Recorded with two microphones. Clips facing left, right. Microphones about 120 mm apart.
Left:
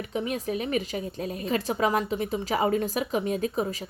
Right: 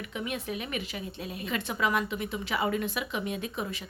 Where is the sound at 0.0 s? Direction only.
35° left (ahead or behind).